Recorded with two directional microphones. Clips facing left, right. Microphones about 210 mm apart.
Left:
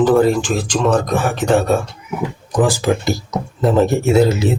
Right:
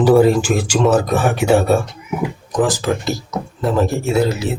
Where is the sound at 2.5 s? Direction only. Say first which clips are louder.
Left 2 dB; 10° left (ahead or behind).